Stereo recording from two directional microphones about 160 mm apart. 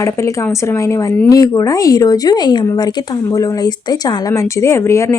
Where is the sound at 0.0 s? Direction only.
20° left (ahead or behind).